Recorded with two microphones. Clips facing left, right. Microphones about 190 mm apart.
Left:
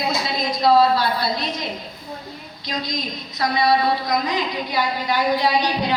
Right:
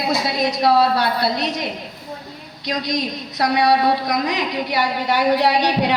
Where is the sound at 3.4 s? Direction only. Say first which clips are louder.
Right 2 dB; 70° right (ahead or behind).